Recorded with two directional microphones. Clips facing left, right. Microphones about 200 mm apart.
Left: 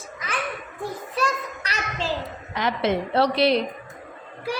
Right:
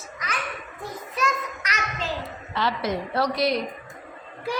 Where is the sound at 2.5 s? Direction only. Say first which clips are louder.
Left 3 dB; 20° left (ahead or behind).